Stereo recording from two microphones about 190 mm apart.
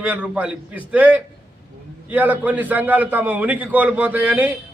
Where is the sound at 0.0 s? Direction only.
5° right (ahead or behind).